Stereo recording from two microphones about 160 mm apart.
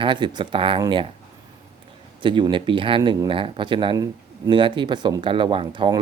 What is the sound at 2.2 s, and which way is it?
A man's voice, 30° right (ahead or behind).